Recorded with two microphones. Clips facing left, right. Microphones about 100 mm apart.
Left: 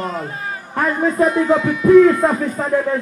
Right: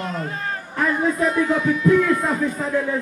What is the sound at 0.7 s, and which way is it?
Speech, 45° left (ahead or behind).